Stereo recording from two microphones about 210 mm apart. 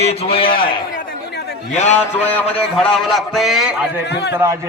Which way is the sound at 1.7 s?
35° left (ahead or behind).